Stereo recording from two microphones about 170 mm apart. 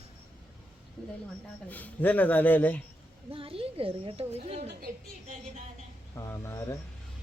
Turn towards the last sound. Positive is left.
turn(degrees=15)  # may be behind; listen again after turning